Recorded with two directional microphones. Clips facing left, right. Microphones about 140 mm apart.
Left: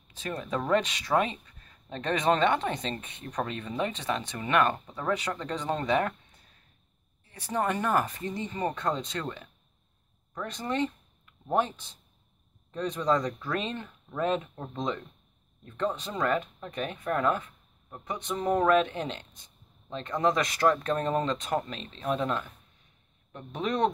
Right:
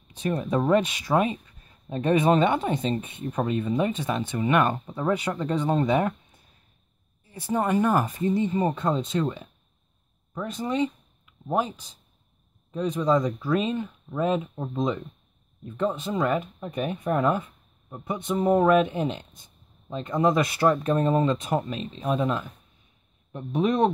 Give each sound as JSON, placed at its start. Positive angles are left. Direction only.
{"t": 0.1, "sound": "speech", "side_deg": -20}
{"t": 3.3, "sound": "speech", "side_deg": -25}
{"t": 3.6, "sound": "speech", "side_deg": -10}
{"t": 5.1, "sound": "speech", "side_deg": -10}
{"t": 7.4, "sound": "speech", "side_deg": -15}
{"t": 8.8, "sound": "speech", "side_deg": -5}
{"t": 10.4, "sound": "speech", "side_deg": -10}
{"t": 17.4, "sound": "a sound", "side_deg": -15}
{"t": 18.3, "sound": "speech", "side_deg": -25}
{"t": 18.8, "sound": "speech", "side_deg": -10}